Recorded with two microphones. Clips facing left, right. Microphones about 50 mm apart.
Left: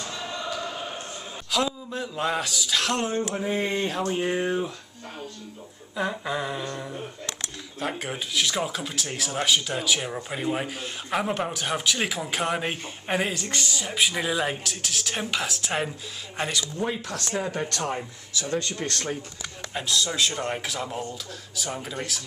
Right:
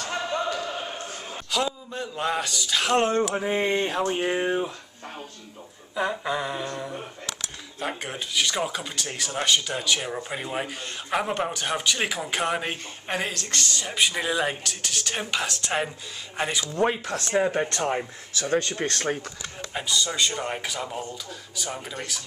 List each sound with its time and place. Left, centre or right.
1.5 s speech: centre
3.3 s speech: right
5.9 s speech: centre
7.8 s speech: centre
16.6 s speech: right
16.9 s speech: right
18.3 s speech: right
19.7 s speech: centre